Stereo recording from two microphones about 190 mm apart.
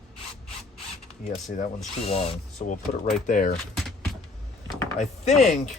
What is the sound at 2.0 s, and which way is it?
Speech, 30° left (ahead or behind).